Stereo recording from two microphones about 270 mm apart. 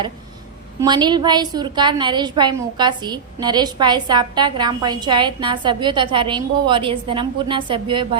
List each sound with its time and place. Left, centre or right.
0.8 s a woman's voice: centre